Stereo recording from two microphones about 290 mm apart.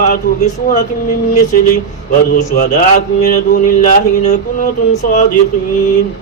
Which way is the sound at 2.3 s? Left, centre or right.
Left.